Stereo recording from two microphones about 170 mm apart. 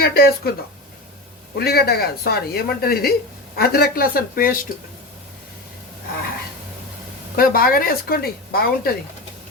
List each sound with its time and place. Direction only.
0.0 s speech: 65° left (ahead or behind)
1.5 s speech: 65° left (ahead or behind)
7.3 s speech: 60° left (ahead or behind)